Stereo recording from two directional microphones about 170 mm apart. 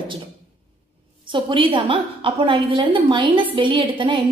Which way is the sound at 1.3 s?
30° right (ahead or behind).